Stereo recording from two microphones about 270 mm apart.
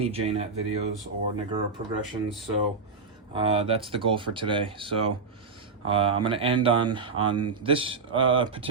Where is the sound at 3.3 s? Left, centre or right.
Centre.